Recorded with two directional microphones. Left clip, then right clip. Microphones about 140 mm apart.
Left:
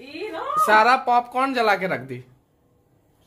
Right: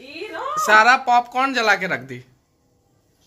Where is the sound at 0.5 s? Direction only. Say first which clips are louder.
Right 2 dB; 5° left (ahead or behind).